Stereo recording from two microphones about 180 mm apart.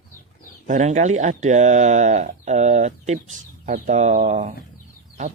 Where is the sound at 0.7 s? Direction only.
40° right (ahead or behind).